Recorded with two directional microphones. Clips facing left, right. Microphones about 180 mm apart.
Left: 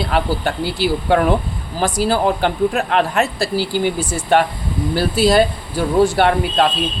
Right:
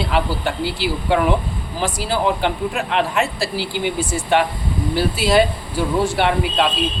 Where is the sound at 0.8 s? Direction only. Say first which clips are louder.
Left 3 dB; 45° left (ahead or behind).